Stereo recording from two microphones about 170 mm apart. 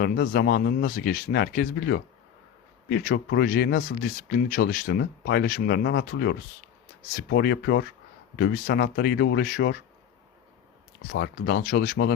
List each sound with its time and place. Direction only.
0.0 s speech: 70° left (ahead or behind)
2.9 s speech: 80° left
8.4 s speech: 65° left (ahead or behind)
11.2 s speech: 70° left (ahead or behind)